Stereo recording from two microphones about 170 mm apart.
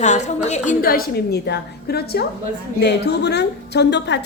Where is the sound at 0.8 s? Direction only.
60° left (ahead or behind); by 4.2 s 90° left.